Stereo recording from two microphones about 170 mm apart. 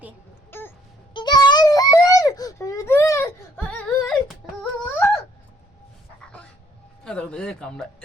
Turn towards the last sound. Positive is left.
turn(degrees=5)  # may be behind; listen again after turning